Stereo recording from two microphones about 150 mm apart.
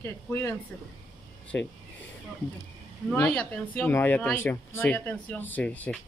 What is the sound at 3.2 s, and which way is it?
Speech, 10° left (ahead or behind).